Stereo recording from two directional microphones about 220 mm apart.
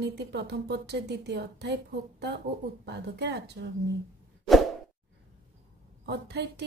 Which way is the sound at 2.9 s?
50° right (ahead or behind).